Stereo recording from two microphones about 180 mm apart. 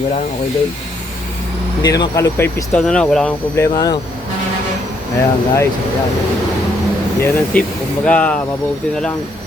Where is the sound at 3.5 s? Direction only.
20° left (ahead or behind).